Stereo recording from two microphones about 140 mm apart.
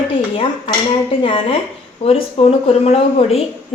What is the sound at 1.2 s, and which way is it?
A woman's voice, 40° left (ahead or behind).